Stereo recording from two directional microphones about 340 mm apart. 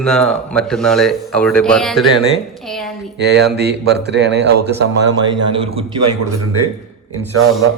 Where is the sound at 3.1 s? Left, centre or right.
Right.